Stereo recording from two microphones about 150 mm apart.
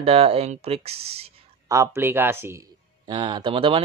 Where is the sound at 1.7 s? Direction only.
20° right (ahead or behind).